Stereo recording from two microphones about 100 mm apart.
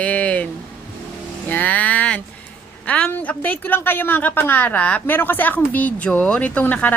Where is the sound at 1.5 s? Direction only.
15° left (ahead or behind).